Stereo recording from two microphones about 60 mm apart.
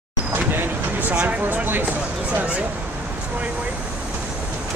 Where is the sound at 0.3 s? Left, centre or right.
Right.